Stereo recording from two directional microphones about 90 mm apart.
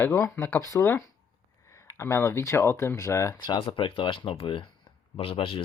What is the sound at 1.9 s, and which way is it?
Speech, 30° left (ahead or behind).